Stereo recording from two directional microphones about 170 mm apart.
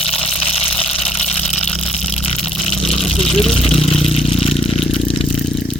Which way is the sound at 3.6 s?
35° left (ahead or behind).